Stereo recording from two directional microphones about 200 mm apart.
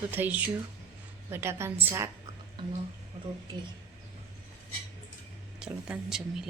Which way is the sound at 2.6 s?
25° right (ahead or behind).